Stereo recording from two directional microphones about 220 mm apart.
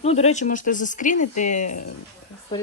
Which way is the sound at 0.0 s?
30° left (ahead or behind).